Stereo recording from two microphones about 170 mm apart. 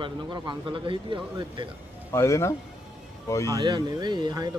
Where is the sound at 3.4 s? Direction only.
20° right (ahead or behind).